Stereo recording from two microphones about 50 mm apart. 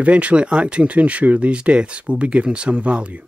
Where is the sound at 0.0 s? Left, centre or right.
Right.